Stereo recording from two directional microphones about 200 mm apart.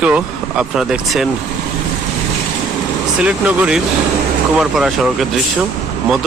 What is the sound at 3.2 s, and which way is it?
Speech, 5° right (ahead or behind).